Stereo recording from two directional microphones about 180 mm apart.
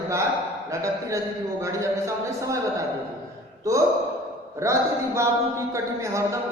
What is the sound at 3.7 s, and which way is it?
Speech, 15° right (ahead or behind).